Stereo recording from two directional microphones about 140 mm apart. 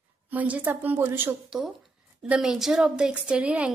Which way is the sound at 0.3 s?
10° right (ahead or behind).